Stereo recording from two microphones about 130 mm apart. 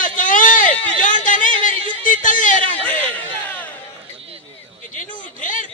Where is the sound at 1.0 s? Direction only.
85° left.